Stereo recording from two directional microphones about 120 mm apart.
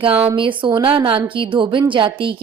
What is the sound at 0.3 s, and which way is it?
A woman's voice, 45° right (ahead or behind).